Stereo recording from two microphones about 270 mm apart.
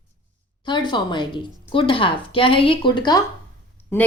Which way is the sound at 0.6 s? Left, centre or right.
Centre.